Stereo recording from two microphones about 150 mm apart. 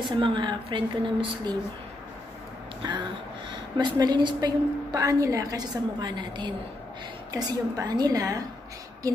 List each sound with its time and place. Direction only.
0.2 s speech: 35° right (ahead or behind)
2.8 s a woman's voice: 30° right (ahead or behind)